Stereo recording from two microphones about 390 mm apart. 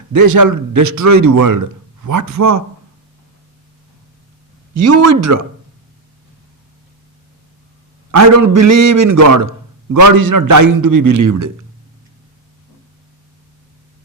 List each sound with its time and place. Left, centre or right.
0.1 s a man's voice: right
4.7 s speech: right
8.1 s a man's voice: right